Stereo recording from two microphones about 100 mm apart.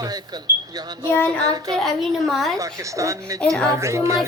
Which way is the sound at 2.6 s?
35° right (ahead or behind).